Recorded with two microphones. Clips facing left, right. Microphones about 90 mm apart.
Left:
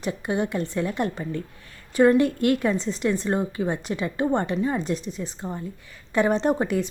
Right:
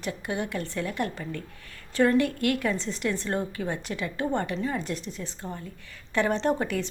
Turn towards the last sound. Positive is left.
turn(degrees=20)  # may be behind; listen again after turning